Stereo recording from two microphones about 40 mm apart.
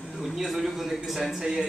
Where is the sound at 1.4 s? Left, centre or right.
Centre.